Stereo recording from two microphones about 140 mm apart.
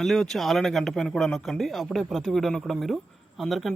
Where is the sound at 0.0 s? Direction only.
5° left (ahead or behind).